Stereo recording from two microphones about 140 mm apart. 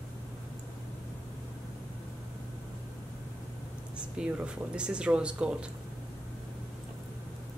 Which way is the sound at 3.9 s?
5° right (ahead or behind).